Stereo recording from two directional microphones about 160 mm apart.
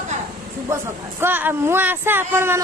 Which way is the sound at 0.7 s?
15° right (ahead or behind).